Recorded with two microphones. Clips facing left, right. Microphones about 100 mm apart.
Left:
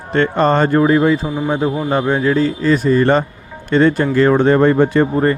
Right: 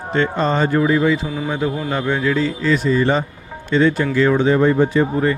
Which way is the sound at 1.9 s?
30° left (ahead or behind).